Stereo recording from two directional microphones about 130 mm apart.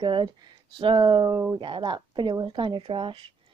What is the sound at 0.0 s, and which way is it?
Speech, 35° right (ahead or behind).